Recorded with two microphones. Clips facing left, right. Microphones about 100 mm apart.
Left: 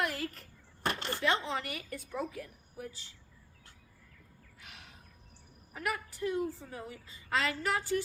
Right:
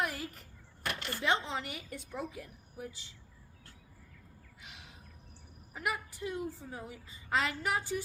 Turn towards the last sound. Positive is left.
turn(degrees=-15)  # may be behind; listen again after turning